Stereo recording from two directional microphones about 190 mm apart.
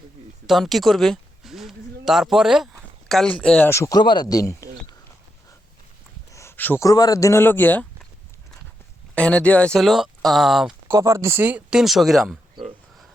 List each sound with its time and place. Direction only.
0.4 s speech: centre (ahead or behind); by 4.7 s 15° left (ahead or behind)
6.3 s speech: 10° left (ahead or behind)
9.1 s speech: 5° left (ahead or behind)
10.8 s speech: 15° right (ahead or behind)